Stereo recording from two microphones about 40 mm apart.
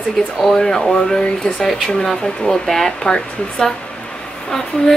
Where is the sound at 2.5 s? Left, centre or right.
Centre.